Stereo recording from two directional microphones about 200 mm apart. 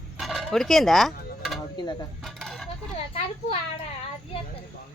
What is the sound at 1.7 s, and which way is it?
Speech, 20° left (ahead or behind).